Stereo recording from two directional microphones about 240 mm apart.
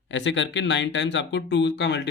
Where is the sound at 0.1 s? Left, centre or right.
Left.